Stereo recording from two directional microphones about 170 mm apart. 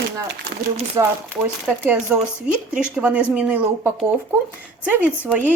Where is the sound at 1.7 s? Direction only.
10° right (ahead or behind).